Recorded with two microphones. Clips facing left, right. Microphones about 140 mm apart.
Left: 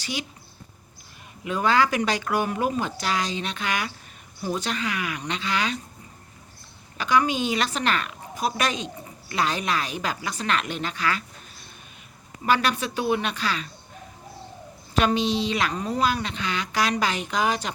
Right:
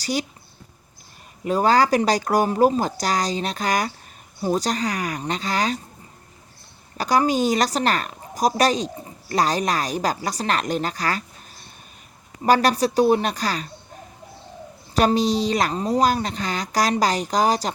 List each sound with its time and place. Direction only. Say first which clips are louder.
0.0 s speech: right 7 dB; 40° right (ahead or behind)
1.5 s a woman's voice: right 4 dB; 40° right (ahead or behind)
6.9 s a woman's voice: right 3 dB; 40° right (ahead or behind)
14.9 s a woman's voice: right 4 dB; 40° right (ahead or behind)